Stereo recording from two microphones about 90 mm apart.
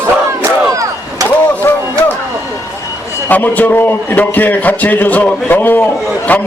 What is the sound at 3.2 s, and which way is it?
A man's voice, 20° left (ahead or behind).